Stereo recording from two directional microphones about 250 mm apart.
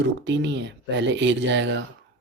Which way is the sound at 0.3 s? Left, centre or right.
Right.